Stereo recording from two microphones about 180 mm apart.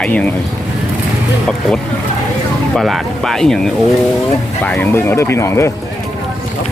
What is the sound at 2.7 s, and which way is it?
Speech, centre (ahead or behind).